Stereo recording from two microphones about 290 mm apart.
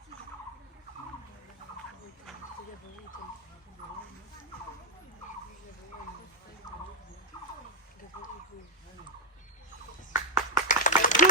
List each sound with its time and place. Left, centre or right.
7.3 s a sound: centre
10.1 s clapping: centre
10.7 s clapping: left